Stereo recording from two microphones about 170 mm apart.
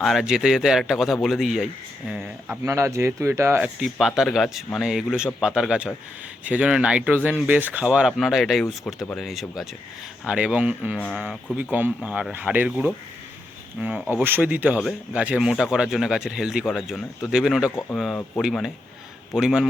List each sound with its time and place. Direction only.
0.0 s speech: centre (ahead or behind)
2.6 s speech: 15° right (ahead or behind)
3.8 s speech: centre (ahead or behind)
10.9 s speech: 5° left (ahead or behind)
17.7 s speech: 10° left (ahead or behind)
18.4 s speech: centre (ahead or behind)